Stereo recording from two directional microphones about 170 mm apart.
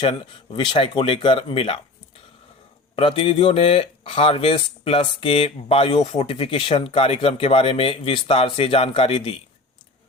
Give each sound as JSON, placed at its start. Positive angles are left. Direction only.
{"t": 0.0, "sound": "speech", "side_deg": 30}
{"t": 2.9, "sound": "speech", "side_deg": 30}